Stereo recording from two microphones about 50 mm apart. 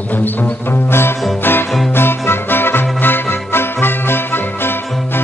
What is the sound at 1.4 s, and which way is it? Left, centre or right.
Music, left.